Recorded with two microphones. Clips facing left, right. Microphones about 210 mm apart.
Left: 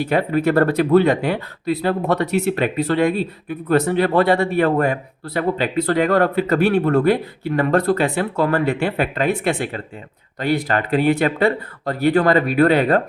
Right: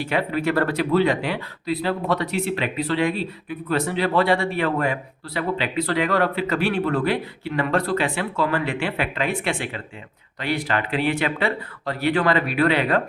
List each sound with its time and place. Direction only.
0.0 s speech: 45° left (ahead or behind)